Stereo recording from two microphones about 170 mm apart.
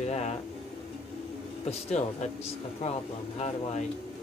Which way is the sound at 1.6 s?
40° left (ahead or behind).